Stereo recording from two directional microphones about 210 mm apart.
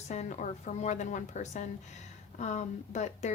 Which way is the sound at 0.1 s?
35° left (ahead or behind).